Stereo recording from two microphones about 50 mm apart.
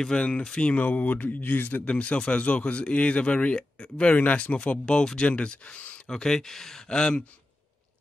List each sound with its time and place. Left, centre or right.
0.0 s speech: centre
0.8 s mantra: left
1.9 s speech: left
4.8 s speech: centre